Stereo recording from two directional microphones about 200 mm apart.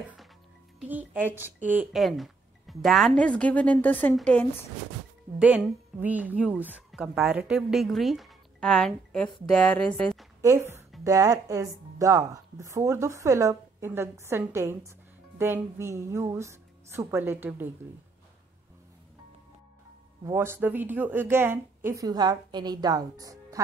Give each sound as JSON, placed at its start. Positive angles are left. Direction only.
{"t": 0.7, "sound": "speech", "side_deg": -10}
{"t": 5.4, "sound": "a woman's voice", "side_deg": -10}
{"t": 10.4, "sound": "a woman's voice", "side_deg": -15}
{"t": 20.2, "sound": "a woman's voice", "side_deg": -10}